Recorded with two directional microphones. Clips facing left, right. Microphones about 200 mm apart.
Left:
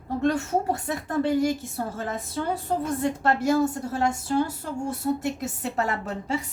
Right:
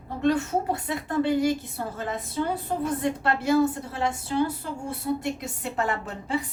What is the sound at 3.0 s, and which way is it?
A woman's voice, 45° left (ahead or behind).